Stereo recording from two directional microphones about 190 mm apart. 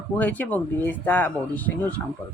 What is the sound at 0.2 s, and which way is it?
Speech, 10° left (ahead or behind).